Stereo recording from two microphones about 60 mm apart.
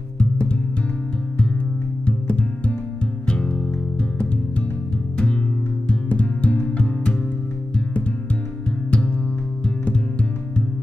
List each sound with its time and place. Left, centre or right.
0.2 s music: centre
2.0 s music: centre
5.1 s music: centre
9.8 s music: centre